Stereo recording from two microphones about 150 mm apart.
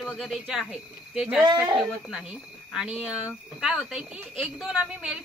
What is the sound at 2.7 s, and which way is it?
Speech, 5° right (ahead or behind).